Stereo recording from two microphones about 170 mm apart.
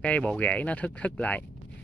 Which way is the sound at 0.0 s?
10° left (ahead or behind).